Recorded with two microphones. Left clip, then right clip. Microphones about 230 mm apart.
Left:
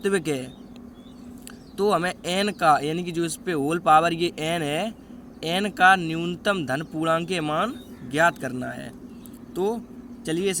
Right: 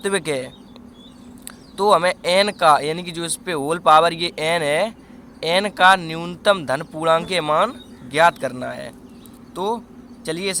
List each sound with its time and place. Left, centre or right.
0.0 s speech: centre
1.7 s speech: centre
10.2 s speech: centre